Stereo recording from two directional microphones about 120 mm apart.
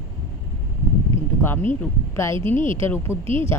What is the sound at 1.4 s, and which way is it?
A woman's voice, 15° left (ahead or behind).